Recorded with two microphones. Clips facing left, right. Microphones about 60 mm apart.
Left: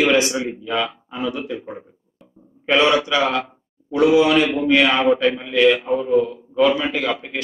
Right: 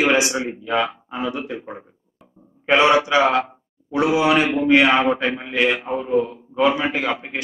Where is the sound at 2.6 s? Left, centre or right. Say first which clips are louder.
Right 1 dB; right.